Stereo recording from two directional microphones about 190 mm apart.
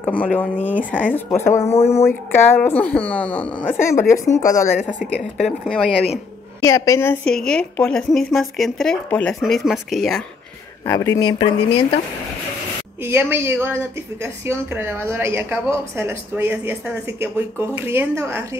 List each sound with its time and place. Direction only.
0.0 s speech: 10° left (ahead or behind)
1.7 s speech: 35° left (ahead or behind)
2.0 s speech: 10° left (ahead or behind)
4.7 s speech: 5° right (ahead or behind)
6.6 s speech: 15° left (ahead or behind); by 10.2 s centre (ahead or behind)
10.9 s speech: 15° left (ahead or behind)
11.3 s speech: 30° left (ahead or behind)
13.0 s a woman's voice: 10° right (ahead or behind)